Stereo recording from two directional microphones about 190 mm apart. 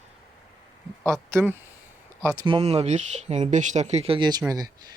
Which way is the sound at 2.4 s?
30° right (ahead or behind).